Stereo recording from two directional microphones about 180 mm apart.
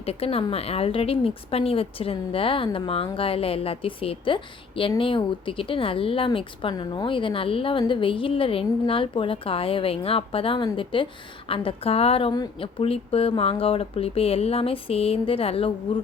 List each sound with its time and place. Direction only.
0.0 s a woman's voice: 35° left (ahead or behind)